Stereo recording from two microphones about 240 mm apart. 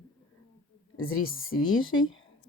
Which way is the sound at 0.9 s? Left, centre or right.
Left.